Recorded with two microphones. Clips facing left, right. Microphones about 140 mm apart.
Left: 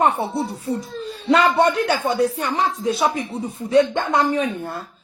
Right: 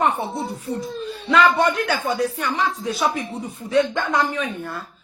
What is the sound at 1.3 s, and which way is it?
A woman's voice, 35° left (ahead or behind).